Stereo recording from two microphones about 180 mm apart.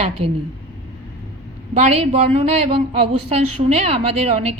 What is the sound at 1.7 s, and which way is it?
Speech, 35° right (ahead or behind).